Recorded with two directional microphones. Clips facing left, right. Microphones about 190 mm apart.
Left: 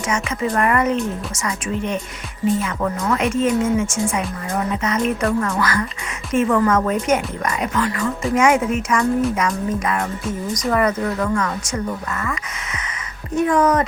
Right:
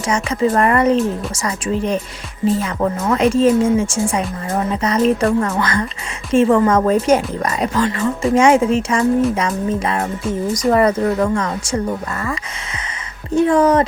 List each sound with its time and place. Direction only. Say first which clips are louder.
0.0 s a woman's voice: right 5 dB; 35° right (ahead or behind)